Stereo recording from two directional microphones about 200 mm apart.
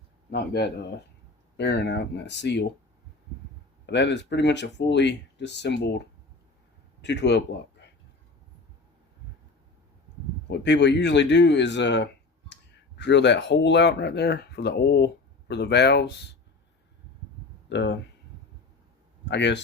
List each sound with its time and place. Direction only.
0.3 s speech: 55° left (ahead or behind)
3.8 s speech: 60° left (ahead or behind)
7.0 s speech: 60° left (ahead or behind)
10.5 s speech: 60° left (ahead or behind)
17.7 s speech: 60° left (ahead or behind)
19.2 s speech: 60° left (ahead or behind)